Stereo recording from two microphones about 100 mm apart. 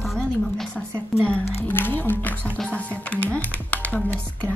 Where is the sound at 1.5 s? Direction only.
20° left (ahead or behind).